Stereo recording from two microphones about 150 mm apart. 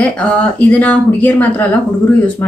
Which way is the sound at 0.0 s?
5° left (ahead or behind).